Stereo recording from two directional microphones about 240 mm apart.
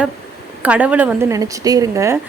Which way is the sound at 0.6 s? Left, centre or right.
Centre.